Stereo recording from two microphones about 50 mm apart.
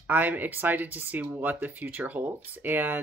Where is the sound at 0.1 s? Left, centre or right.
Right.